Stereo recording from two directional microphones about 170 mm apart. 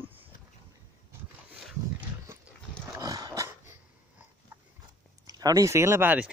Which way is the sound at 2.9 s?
20° right (ahead or behind).